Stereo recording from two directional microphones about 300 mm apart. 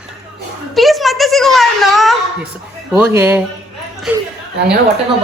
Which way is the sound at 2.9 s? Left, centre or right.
Centre.